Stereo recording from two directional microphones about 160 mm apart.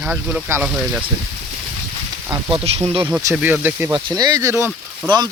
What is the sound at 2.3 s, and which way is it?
Speech, 20° right (ahead or behind).